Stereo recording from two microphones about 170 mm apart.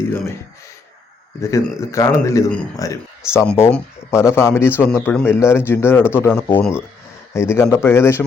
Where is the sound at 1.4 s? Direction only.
15° left (ahead or behind).